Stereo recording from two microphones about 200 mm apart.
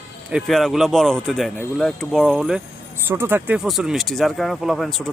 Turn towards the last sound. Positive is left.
turn(degrees=0)  # may be behind; listen again after turning